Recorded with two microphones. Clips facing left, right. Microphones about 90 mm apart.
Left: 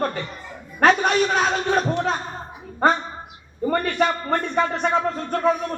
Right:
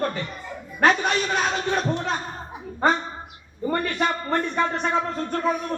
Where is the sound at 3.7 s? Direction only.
Centre (ahead or behind).